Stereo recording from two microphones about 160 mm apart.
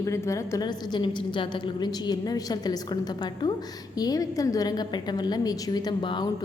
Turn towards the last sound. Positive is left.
turn(degrees=30)  # may be behind; listen again after turning